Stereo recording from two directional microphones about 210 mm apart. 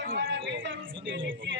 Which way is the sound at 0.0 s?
55° right (ahead or behind).